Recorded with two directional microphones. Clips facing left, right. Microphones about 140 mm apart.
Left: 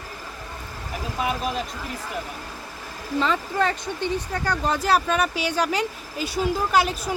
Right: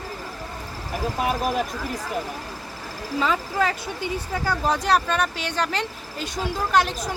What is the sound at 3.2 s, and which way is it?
Speech, 5° right (ahead or behind).